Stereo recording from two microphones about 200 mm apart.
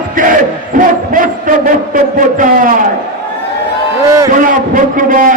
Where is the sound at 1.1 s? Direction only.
40° right (ahead or behind).